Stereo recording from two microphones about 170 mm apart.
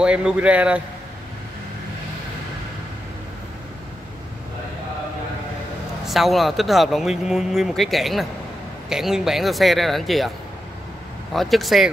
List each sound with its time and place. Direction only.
0.0 s a man's voice: 5° right (ahead or behind)
6.0 s speech: centre (ahead or behind)
11.3 s speech: centre (ahead or behind)